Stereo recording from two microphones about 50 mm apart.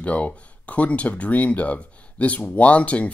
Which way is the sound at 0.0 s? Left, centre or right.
Left.